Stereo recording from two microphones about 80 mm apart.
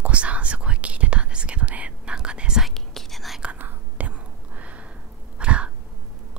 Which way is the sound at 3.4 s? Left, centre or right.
Centre.